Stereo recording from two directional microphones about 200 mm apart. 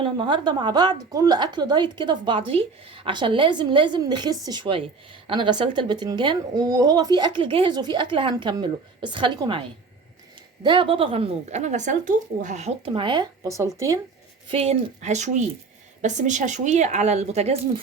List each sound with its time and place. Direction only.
0.0 s speech: 25° right (ahead or behind)
14.5 s speech: 30° right (ahead or behind)